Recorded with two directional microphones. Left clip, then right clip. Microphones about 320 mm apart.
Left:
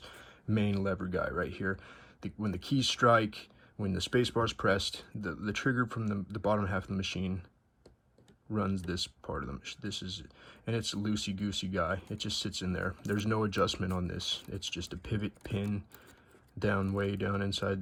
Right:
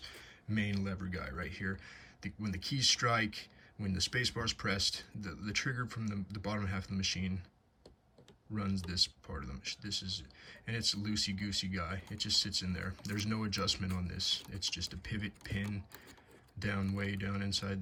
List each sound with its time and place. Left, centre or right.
0.0 s a sound: centre
1.0 s speech: left
1.5 s speech: centre
8.5 s speech: centre